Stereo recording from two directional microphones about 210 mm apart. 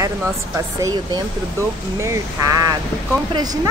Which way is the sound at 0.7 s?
15° right (ahead or behind).